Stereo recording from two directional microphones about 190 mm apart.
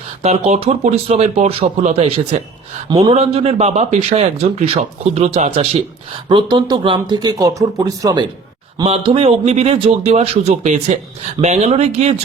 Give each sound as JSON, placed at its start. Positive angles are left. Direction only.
{"t": 0.2, "sound": "speech", "side_deg": -35}
{"t": 8.8, "sound": "speech", "side_deg": -30}